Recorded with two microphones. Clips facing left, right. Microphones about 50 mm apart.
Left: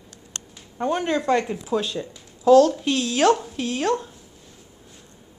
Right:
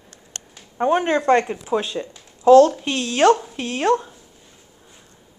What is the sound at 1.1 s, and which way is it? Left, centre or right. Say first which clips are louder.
Speech: right 3 dB; right.